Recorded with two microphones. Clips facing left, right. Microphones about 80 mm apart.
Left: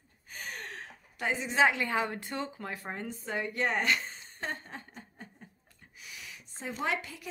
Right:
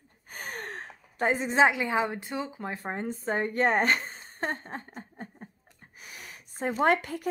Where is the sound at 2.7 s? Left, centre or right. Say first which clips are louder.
Right 5 dB; right.